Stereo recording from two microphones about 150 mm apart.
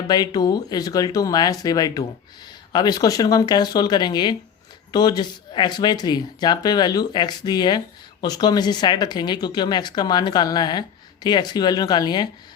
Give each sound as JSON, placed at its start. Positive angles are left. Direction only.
{"t": 0.1, "sound": "speech", "side_deg": 25}